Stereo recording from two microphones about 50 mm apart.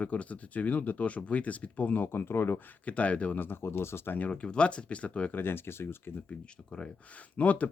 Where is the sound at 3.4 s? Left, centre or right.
Left.